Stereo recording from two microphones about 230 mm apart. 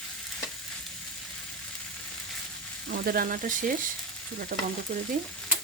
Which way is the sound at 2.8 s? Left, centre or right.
Right.